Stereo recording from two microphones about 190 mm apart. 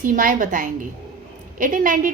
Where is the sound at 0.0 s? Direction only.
45° right (ahead or behind).